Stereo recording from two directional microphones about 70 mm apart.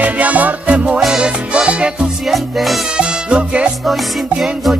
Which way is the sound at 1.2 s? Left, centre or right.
Centre.